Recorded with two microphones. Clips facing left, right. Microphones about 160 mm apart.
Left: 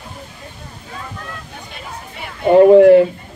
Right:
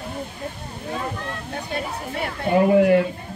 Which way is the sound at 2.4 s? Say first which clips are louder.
Left 10 dB; 60° left (ahead or behind).